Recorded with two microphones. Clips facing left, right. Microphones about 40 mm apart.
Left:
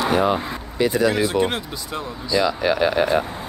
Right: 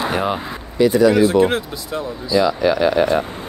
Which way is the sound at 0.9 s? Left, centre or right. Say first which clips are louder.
Right 6 dB; left.